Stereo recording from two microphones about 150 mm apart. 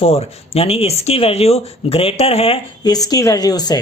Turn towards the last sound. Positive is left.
turn(degrees=25)  # may be behind; listen again after turning